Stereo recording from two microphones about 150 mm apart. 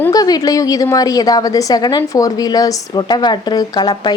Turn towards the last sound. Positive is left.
turn(degrees=30)  # may be behind; listen again after turning